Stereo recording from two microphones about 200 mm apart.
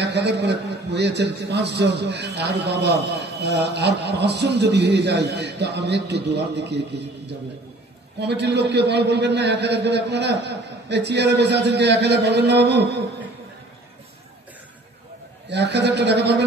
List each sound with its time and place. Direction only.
0.0 s a man's voice: 55° right (ahead or behind)
15.5 s a man's voice: 60° right (ahead or behind)